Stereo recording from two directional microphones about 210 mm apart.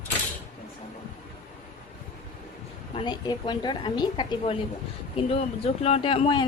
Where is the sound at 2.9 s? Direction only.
20° left (ahead or behind).